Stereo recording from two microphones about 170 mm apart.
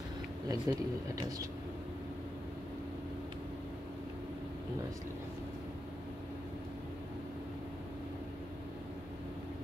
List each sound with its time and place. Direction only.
0.5 s speech: 20° right (ahead or behind)